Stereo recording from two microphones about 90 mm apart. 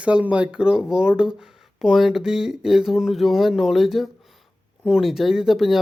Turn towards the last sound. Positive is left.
turn(degrees=-5)  # may be behind; listen again after turning